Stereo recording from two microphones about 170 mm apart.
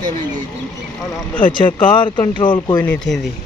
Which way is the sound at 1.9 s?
25° left (ahead or behind).